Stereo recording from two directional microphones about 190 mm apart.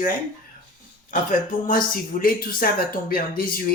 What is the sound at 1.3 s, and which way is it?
Speech, 45° left (ahead or behind).